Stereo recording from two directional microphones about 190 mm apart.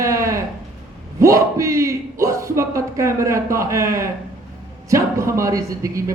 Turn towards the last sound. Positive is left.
turn(degrees=-15)  # may be behind; listen again after turning